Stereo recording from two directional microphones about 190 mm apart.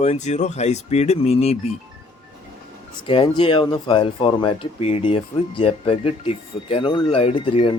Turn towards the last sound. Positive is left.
turn(degrees=25)  # may be behind; listen again after turning